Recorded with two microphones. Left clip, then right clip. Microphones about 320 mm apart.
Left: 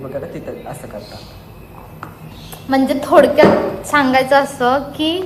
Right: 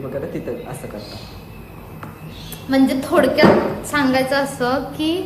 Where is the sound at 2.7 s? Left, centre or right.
Centre.